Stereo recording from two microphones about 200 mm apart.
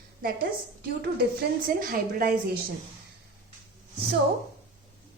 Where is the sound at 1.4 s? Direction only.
45° right (ahead or behind).